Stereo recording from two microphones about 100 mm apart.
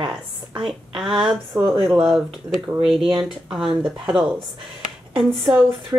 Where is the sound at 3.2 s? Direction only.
5° right (ahead or behind).